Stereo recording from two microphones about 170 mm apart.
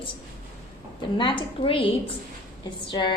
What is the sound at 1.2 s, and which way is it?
A woman's voice, 30° left (ahead or behind).